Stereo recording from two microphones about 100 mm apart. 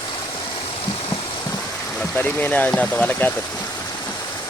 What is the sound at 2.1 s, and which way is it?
Speech, 20° left (ahead or behind).